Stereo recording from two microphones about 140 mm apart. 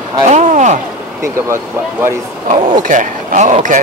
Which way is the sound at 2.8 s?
70° right (ahead or behind).